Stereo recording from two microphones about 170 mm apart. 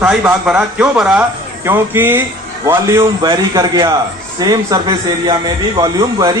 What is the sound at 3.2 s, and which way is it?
A man's voice, 25° right (ahead or behind).